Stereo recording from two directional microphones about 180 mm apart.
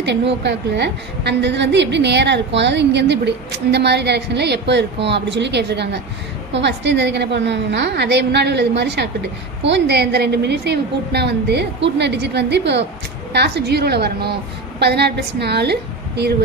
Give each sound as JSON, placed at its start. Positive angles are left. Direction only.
{"t": 0.0, "sound": "a woman's voice", "side_deg": -70}